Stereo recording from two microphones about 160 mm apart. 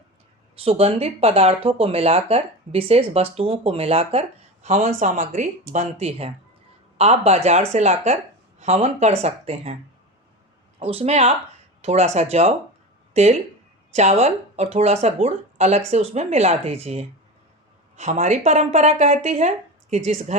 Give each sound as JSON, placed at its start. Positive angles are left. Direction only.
{"t": 0.6, "sound": "speech", "side_deg": -40}
{"t": 10.8, "sound": "speech", "side_deg": -35}